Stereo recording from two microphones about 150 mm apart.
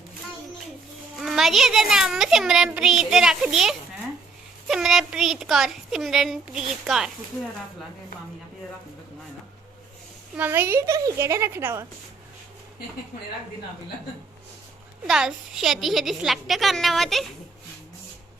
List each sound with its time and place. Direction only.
1.1 s a child's voice: centre (ahead or behind)
10.3 s a woman's voice: 15° right (ahead or behind)
15.0 s a child's voice: 5° right (ahead or behind)